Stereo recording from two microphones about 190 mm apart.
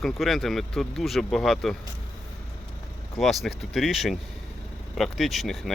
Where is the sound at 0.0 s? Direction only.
Centre (ahead or behind).